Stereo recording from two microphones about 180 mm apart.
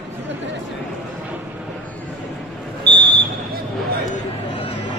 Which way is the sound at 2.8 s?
25° right (ahead or behind).